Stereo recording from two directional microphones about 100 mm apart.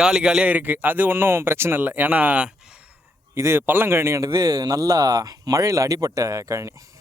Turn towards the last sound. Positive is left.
turn(degrees=-30)  # may be behind; listen again after turning